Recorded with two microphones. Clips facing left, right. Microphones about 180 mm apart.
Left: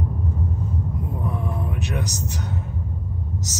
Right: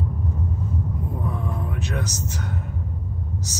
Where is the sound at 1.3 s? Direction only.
15° left (ahead or behind).